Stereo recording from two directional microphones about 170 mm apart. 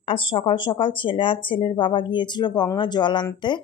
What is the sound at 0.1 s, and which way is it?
Speech, 30° left (ahead or behind).